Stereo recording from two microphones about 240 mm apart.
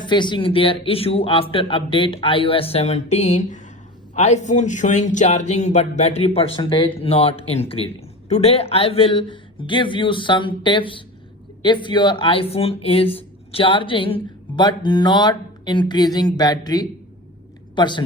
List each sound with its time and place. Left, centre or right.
0.0 s speech: centre